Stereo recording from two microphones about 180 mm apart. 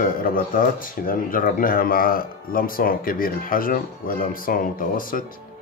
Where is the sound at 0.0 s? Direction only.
50° left (ahead or behind).